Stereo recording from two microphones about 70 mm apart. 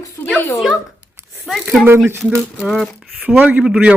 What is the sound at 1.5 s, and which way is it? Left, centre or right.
Speech, centre.